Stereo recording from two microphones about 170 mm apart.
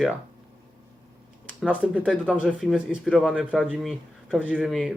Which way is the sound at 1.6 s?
10° right (ahead or behind).